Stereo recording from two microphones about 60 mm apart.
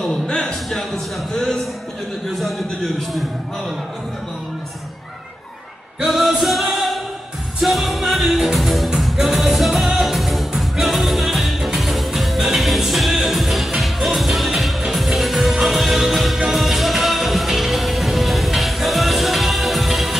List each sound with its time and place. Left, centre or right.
0.0 s a man's voice: centre
6.0 s music: centre